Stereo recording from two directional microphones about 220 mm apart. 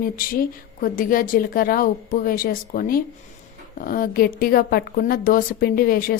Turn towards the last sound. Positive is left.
turn(degrees=40)  # may be behind; listen again after turning